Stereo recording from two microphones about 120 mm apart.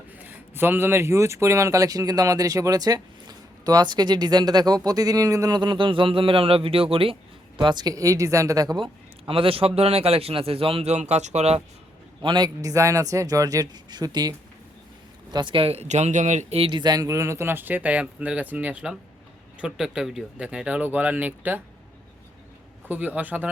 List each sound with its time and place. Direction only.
0.2 s a man's voice: 15° right (ahead or behind); by 7.2 s 50° right (ahead or behind)
7.6 s a man's voice: 35° right (ahead or behind)
9.2 s a man's voice: 50° right (ahead or behind); by 11.6 s 65° right (ahead or behind)
12.2 s a man's voice: 35° right (ahead or behind); by 16.6 s 80° right
16.6 s speech: 45° right (ahead or behind); by 21.6 s 15° right (ahead or behind)
22.9 s speech: 15° right (ahead or behind)